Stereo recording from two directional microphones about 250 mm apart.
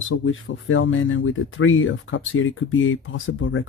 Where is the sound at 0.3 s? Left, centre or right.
Left.